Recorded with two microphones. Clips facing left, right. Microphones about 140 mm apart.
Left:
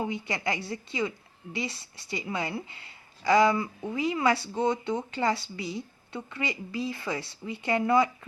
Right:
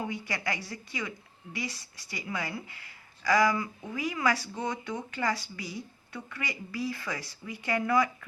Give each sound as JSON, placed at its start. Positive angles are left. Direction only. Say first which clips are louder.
{"t": 0.0, "sound": "a woman's voice", "louder": "left 3 dB", "side_deg": 25}